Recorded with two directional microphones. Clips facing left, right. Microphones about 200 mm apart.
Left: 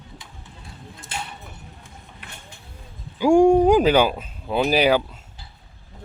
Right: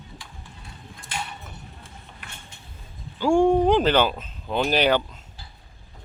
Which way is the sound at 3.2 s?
15° left (ahead or behind).